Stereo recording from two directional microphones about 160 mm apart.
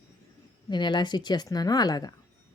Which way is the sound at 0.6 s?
30° left (ahead or behind).